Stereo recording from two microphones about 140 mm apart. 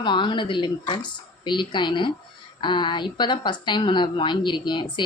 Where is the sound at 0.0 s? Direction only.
35° left (ahead or behind).